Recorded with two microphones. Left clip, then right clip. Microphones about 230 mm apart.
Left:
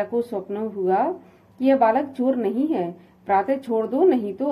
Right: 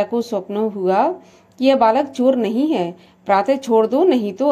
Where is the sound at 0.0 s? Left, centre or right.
Right.